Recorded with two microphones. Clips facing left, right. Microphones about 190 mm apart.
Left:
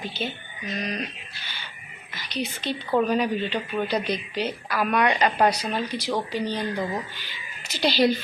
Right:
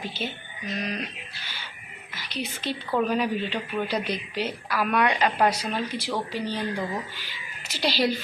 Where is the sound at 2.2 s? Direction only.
5° right (ahead or behind).